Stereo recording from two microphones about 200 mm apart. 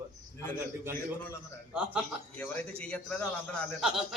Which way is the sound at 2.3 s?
5° left (ahead or behind).